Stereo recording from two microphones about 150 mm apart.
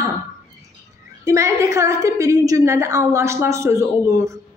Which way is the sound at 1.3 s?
20° right (ahead or behind).